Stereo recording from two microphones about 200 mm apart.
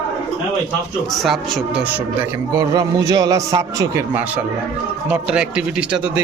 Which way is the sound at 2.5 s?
20° right (ahead or behind).